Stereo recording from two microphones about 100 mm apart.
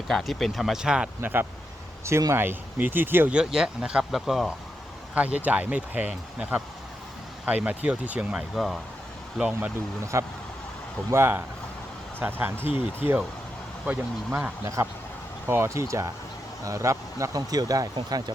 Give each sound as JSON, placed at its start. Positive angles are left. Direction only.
{"t": 0.1, "sound": "speech", "side_deg": 0}
{"t": 1.2, "sound": "speech", "side_deg": -20}
{"t": 3.3, "sound": "speech", "side_deg": -5}
{"t": 5.1, "sound": "speech", "side_deg": -15}
{"t": 10.1, "sound": "speech", "side_deg": -25}
{"t": 14.8, "sound": "speech", "side_deg": -30}